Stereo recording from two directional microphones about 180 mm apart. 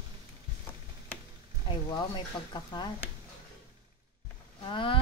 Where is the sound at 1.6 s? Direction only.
25° left (ahead or behind).